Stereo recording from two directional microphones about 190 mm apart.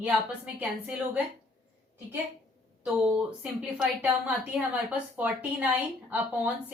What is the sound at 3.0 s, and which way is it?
A woman's voice, 5° right (ahead or behind).